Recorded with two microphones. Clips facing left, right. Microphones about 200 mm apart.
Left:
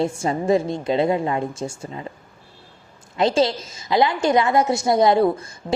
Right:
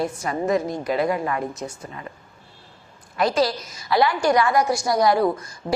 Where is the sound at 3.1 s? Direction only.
25° left (ahead or behind).